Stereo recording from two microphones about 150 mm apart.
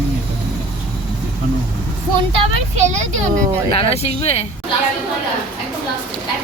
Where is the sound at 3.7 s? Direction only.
45° left (ahead or behind).